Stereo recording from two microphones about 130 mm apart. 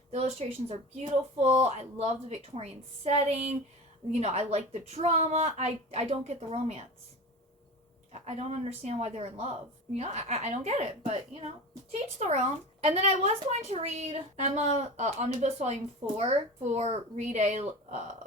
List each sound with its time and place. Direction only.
0.1 s speech: 55° right (ahead or behind)
8.1 s speech: 60° right (ahead or behind)